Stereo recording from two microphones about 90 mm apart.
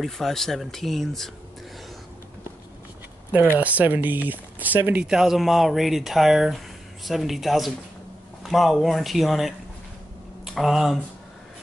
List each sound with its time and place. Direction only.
0.0 s speech: 5° left (ahead or behind)
3.3 s speech: 15° right (ahead or behind)
5.0 s speech: 5° right (ahead or behind)